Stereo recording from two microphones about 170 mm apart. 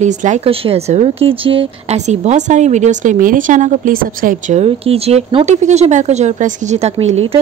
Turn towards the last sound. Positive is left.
turn(degrees=-35)  # may be behind; listen again after turning